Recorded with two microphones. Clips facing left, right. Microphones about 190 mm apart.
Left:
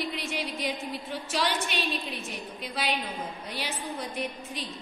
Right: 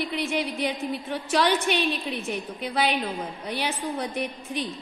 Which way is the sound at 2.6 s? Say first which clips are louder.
Right 6 dB; 60° right (ahead or behind).